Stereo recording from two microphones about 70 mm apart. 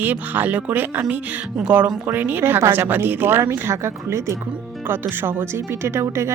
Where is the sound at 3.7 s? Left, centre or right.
Right.